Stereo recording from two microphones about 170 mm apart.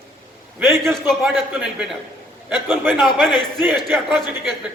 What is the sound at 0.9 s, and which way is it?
A man's voice, centre (ahead or behind).